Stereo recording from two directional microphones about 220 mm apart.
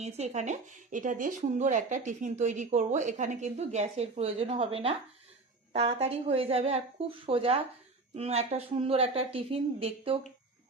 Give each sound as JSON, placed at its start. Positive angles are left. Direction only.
{"t": 0.0, "sound": "a woman's voice", "side_deg": -30}